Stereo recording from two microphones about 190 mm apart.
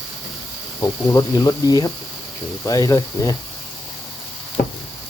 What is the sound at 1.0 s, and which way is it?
Speech, 20° left (ahead or behind).